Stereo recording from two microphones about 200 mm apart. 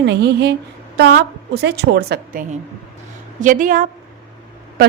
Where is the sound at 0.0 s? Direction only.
55° right (ahead or behind).